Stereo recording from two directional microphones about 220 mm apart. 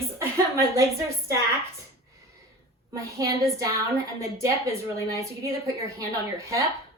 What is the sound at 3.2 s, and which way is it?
A woman's voice, 15° right (ahead or behind).